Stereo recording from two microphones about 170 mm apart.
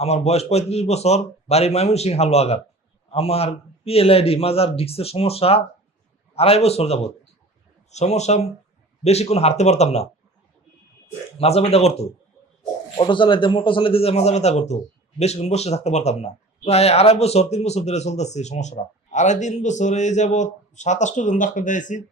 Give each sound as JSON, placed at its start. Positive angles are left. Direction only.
{"t": 0.0, "sound": "speech", "side_deg": 40}
{"t": 11.3, "sound": "speech", "side_deg": 35}